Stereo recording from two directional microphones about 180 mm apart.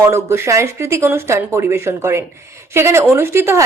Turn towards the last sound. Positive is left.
turn(degrees=-15)  # may be behind; listen again after turning